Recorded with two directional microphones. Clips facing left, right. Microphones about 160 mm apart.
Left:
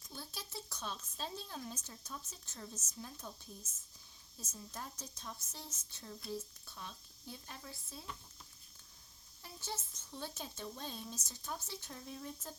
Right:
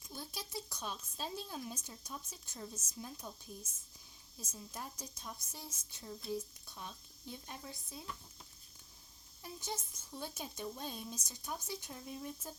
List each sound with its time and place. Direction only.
0.1 s speech: 10° right (ahead or behind)
9.4 s speech: 15° right (ahead or behind)